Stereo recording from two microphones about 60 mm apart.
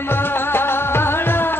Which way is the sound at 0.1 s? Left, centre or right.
Left.